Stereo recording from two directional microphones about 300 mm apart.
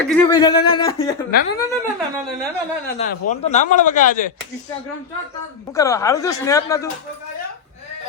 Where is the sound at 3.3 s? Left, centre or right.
Left.